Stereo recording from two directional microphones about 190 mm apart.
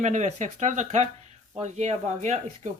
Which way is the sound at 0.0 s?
40° right (ahead or behind).